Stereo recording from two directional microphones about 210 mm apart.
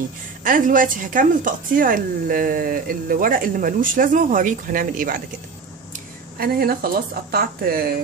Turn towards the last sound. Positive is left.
turn(degrees=-45)  # may be behind; listen again after turning